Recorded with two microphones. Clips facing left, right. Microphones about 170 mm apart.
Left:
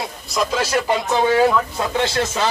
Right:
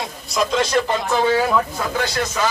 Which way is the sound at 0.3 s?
5° left (ahead or behind).